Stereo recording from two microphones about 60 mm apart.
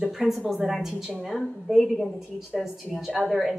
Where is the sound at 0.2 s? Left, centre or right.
Centre.